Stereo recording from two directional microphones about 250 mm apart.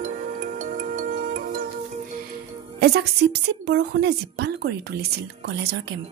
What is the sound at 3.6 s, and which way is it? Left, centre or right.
Speech, right.